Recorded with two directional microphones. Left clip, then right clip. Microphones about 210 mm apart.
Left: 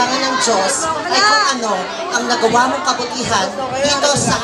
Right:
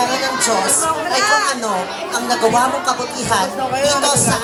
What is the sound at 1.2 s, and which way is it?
Speech, 20° left (ahead or behind).